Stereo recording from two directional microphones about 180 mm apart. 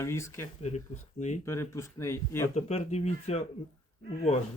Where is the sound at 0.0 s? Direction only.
15° left (ahead or behind).